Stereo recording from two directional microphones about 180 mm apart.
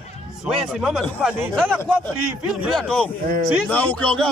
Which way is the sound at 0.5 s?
Centre (ahead or behind).